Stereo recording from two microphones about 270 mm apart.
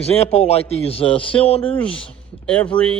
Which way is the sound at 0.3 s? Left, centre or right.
Left.